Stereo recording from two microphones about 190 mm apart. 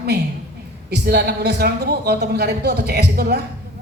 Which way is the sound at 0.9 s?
55° right (ahead or behind).